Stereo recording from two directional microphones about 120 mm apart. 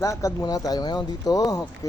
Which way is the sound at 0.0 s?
25° left (ahead or behind).